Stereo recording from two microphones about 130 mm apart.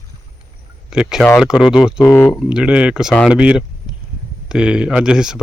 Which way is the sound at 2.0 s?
20° left (ahead or behind).